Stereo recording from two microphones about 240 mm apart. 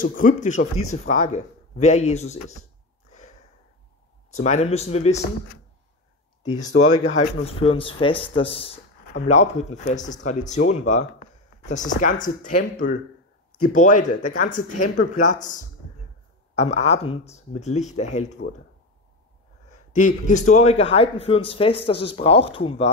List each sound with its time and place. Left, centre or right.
0.0 s speech: left
3.1 s wheeze: left
4.3 s speech: left
6.5 s speech: left
7.2 s speech: left
13.7 s speech: left
19.7 s speech: left